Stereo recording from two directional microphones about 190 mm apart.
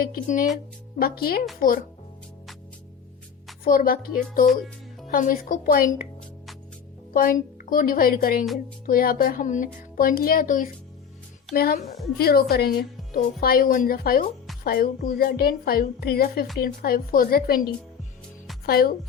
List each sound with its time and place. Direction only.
0.0 s a woman's voice: 45° left (ahead or behind)
3.6 s a woman's voice: 50° left (ahead or behind)
7.1 s a woman's voice: 45° left (ahead or behind)
18.6 s a woman's voice: 50° left (ahead or behind)